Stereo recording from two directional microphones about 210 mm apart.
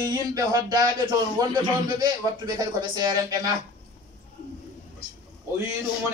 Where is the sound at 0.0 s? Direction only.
15° right (ahead or behind).